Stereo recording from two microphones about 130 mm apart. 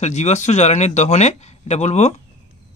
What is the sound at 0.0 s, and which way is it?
Speech, 60° left (ahead or behind).